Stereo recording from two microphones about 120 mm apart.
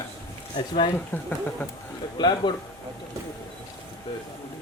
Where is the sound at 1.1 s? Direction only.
15° left (ahead or behind).